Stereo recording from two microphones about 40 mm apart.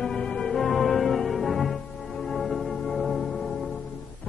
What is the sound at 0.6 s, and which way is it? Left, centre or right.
Music, centre.